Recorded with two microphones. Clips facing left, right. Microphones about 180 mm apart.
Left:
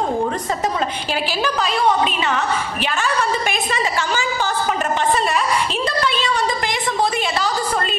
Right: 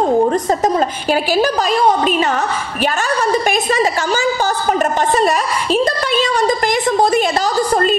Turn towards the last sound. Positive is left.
turn(degrees=-40)  # may be behind; listen again after turning